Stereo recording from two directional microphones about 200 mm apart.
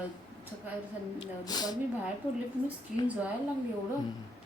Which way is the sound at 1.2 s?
20° left (ahead or behind).